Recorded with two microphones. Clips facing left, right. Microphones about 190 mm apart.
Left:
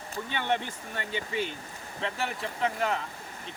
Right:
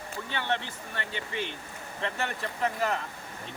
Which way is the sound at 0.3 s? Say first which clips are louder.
Left 2 dB; 15° left (ahead or behind).